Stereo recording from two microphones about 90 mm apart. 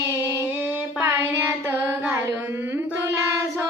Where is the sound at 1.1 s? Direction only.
25° right (ahead or behind).